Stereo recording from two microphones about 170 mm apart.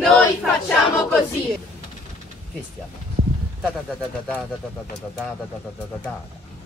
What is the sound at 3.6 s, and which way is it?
Battle cry, 5° left (ahead or behind).